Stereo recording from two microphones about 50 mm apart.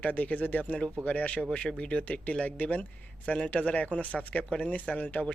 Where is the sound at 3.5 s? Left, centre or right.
Left.